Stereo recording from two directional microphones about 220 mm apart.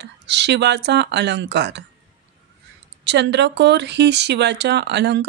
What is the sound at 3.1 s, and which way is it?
Speech, 50° right (ahead or behind).